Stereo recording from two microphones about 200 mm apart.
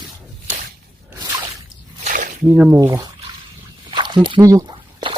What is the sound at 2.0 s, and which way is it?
Squish, 40° right (ahead or behind).